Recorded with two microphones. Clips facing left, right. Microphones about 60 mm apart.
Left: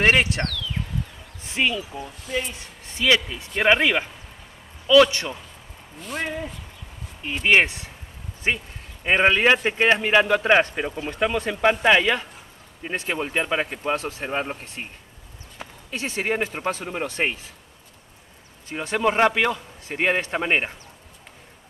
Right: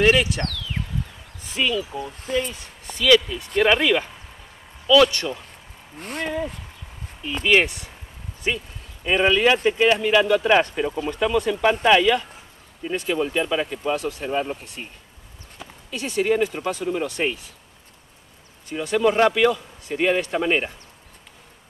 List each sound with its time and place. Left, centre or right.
0.0 s a man's voice: left
1.4 s speech: left
2.3 s speech: right
3.0 s speech: left
5.9 s speech: right
7.4 s a man's voice: left
18.7 s a man's voice: left